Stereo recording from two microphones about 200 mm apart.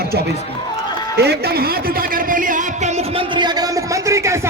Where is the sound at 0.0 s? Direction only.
55° right (ahead or behind).